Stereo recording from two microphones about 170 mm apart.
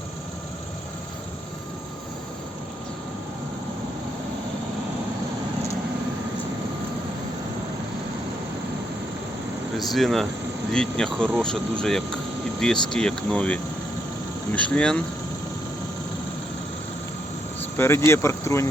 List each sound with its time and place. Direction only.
9.7 s speech: centre (ahead or behind)
17.7 s speech: 15° left (ahead or behind)